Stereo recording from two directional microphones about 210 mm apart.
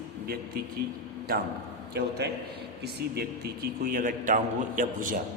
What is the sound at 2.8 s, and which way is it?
A man's voice, 50° right (ahead or behind).